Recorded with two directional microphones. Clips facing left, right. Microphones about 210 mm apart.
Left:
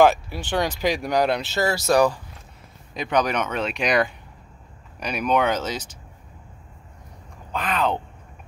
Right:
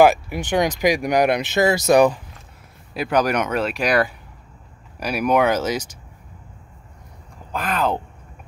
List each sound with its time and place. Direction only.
0.0 s speech: 15° right (ahead or behind)
2.9 s speech: 5° right (ahead or behind)
7.5 s speech: 5° right (ahead or behind)